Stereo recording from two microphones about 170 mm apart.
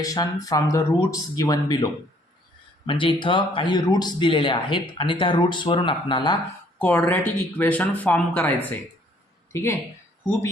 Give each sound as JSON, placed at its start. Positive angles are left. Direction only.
{"t": 0.0, "sound": "speech", "side_deg": 20}
{"t": 6.7, "sound": "speech", "side_deg": 10}